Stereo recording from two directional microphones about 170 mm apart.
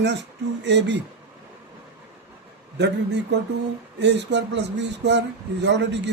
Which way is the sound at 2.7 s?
90° right.